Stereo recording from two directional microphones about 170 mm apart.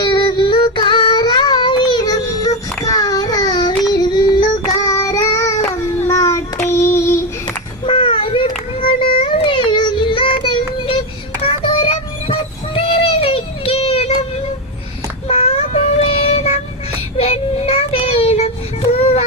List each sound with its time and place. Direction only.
0.0 s child singing: 30° left (ahead or behind)
5.7 s babbling: 15° left (ahead or behind)
6.7 s child singing: 15° left (ahead or behind)
7.4 s children playing: 30° left (ahead or behind)
9.0 s a sound: 30° left (ahead or behind)
11.4 s child singing: 35° left (ahead or behind)
15.3 s child singing: 35° left (ahead or behind)